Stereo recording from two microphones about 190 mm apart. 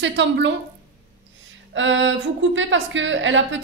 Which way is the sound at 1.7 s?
80° right.